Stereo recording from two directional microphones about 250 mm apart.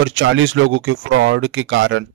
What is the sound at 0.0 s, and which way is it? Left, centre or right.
Speech, right.